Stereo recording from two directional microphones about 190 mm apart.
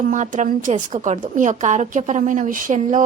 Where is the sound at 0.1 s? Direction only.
40° right (ahead or behind).